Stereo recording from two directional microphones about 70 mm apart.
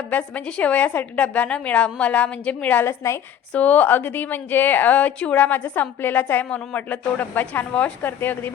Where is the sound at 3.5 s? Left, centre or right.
Left.